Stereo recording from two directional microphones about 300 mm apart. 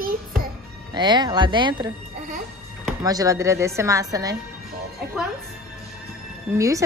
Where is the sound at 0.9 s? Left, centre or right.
Centre.